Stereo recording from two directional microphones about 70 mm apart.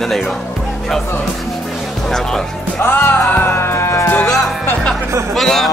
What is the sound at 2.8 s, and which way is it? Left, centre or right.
Music, left.